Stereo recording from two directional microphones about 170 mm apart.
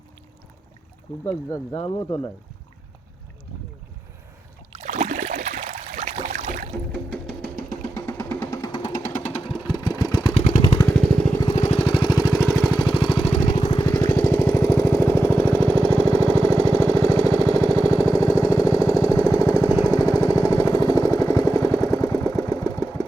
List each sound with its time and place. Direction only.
1.2 s speech: 15° left (ahead or behind)
4.7 s a sound: 40° right (ahead or behind)
6.9 s music: 5° left (ahead or behind)
7.9 s vehicle: 15° left (ahead or behind)
9.0 s vehicle: 45° left (ahead or behind); by 10.3 s 25° left (ahead or behind)
10.3 s vehicle: 45° left (ahead or behind)
11.3 s lawn mower: 25° left (ahead or behind)
11.6 s vehicle: 40° left (ahead or behind); by 12.5 s 20° left (ahead or behind)
12.6 s lawn mower: 25° left (ahead or behind); by 13.6 s 50° left (ahead or behind)
13.6 s lawn mower: 25° left (ahead or behind)
17.7 s jackhammer: 15° left (ahead or behind)
19.9 s vehicle: 20° left (ahead or behind)
22.6 s engine: 20° left (ahead or behind)